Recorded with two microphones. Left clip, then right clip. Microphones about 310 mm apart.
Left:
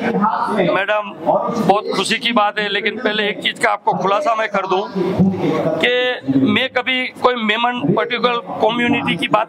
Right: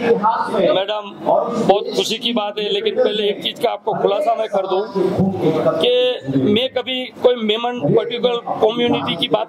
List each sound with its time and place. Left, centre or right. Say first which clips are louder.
1.7 s a man's voice: left 2 dB; left
6.9 s a man's voice: right 1 dB; left
8.6 s speech: even; centre